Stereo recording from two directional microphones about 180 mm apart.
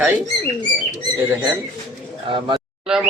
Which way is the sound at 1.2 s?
15° right (ahead or behind).